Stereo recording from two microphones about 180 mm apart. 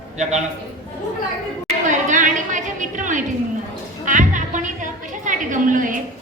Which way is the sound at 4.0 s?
45° right (ahead or behind).